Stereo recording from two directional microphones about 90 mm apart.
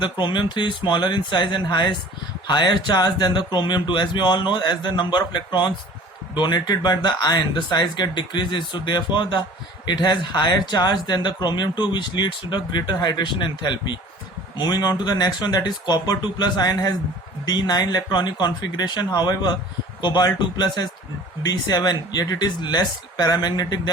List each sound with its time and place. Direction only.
0.0 s speech: 60° left (ahead or behind)